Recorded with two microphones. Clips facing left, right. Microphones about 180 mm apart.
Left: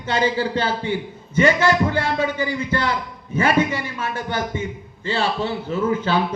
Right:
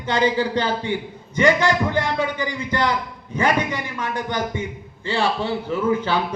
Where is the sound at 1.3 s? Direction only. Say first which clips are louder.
Left 1 dB; 15° right (ahead or behind).